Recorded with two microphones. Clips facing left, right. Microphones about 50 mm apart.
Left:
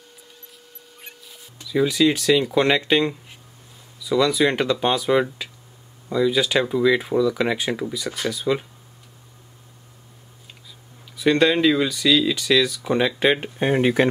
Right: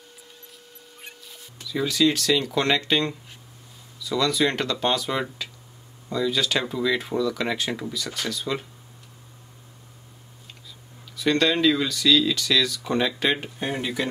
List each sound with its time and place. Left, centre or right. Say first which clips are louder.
1.0 s music: even; centre
1.7 s speech: left 4 dB; centre
11.1 s speech: left 4 dB; centre
13.6 s speech: left 9 dB; left